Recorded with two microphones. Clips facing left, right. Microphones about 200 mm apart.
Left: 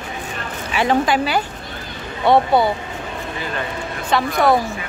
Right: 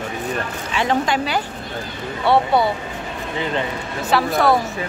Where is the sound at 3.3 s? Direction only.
20° right (ahead or behind).